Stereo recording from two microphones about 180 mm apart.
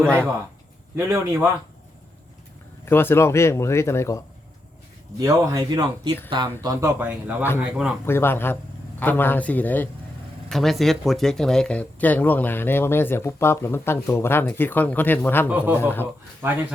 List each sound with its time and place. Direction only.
0.0 s speech: 5° left (ahead or behind)
0.9 s speech: 15° right (ahead or behind)
2.8 s speech: 15° left (ahead or behind)
5.2 s speech: 20° right (ahead or behind)
8.0 s speech: 15° left (ahead or behind)
15.4 s speech: 10° right (ahead or behind)
15.8 s speech: 10° left (ahead or behind)
16.4 s speech: 15° right (ahead or behind)